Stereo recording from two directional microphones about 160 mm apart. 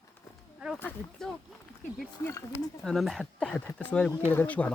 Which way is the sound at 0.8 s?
10° left (ahead or behind).